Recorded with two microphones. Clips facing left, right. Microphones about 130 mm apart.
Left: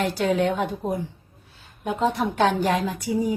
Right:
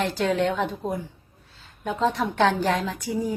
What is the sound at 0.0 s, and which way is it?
A woman's voice, 10° left (ahead or behind).